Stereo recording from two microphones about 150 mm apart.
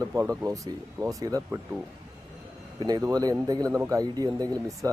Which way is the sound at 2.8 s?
25° right (ahead or behind).